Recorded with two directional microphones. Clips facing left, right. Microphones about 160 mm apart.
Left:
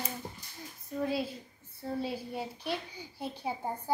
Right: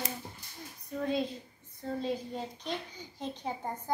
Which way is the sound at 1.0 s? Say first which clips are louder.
Right 1 dB; 5° left (ahead or behind).